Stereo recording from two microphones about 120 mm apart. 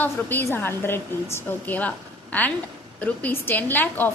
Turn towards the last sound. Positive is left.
turn(degrees=15)  # may be behind; listen again after turning